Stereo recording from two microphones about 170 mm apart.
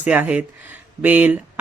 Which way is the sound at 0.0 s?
10° right (ahead or behind).